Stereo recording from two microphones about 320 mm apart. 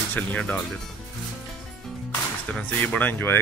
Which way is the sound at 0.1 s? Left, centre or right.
Centre.